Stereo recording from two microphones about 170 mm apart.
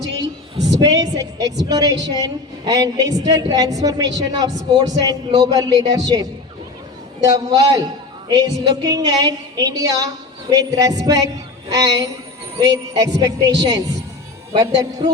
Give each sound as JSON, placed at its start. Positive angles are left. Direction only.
{"t": 0.8, "sound": "a man's voice", "side_deg": -20}